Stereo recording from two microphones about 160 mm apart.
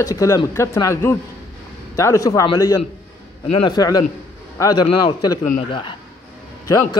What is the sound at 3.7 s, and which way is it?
A man's voice, 25° left (ahead or behind).